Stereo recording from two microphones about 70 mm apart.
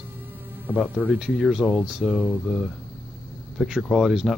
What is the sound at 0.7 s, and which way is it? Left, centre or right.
Speech, centre.